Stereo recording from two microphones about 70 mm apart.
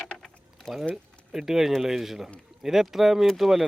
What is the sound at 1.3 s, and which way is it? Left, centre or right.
Speech, centre.